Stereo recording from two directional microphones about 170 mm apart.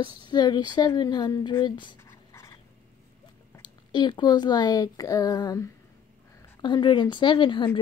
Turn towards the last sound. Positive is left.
turn(degrees=30)  # may be behind; listen again after turning